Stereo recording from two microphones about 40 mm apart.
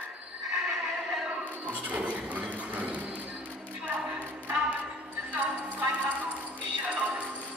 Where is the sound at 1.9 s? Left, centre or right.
Right.